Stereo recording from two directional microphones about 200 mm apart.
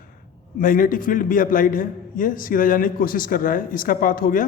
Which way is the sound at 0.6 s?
45° left (ahead or behind).